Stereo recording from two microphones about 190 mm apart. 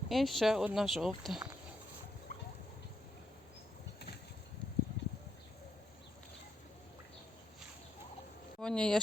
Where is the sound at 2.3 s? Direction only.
50° left (ahead or behind).